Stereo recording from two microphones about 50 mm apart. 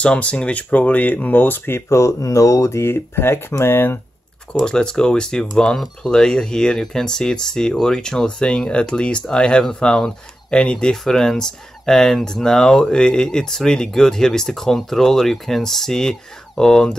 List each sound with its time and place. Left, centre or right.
0.0 s speech: left
1.9 s speech: left
4.5 s speech: centre